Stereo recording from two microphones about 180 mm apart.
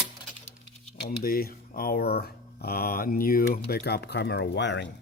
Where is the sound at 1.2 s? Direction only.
55° left (ahead or behind); by 4.9 s 75° left (ahead or behind).